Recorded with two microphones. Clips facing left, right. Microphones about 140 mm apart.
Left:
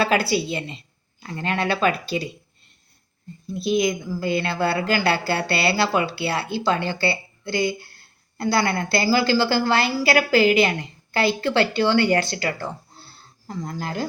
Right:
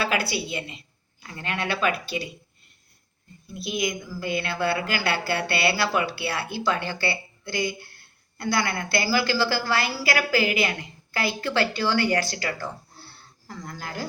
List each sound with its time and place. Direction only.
0.0 s speech: 35° left (ahead or behind)
3.5 s speech: 30° left (ahead or behind)